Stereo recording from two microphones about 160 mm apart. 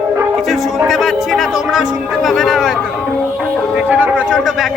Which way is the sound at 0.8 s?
Centre (ahead or behind).